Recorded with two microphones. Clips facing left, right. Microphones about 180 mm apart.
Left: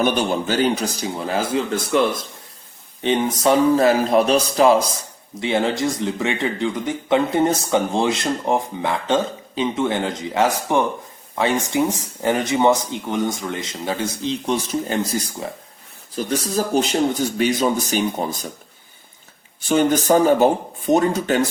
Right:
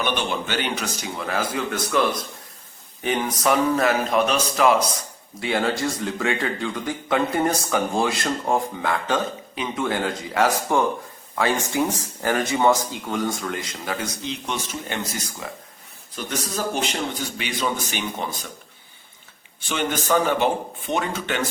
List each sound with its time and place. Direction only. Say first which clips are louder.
0.0 s speech: left 6 dB; 40° left (ahead or behind)
5.4 s speech: left 3 dB; 20° left (ahead or behind); by 18.5 s 40° left (ahead or behind)
19.6 s speech: left 8 dB; 40° left (ahead or behind)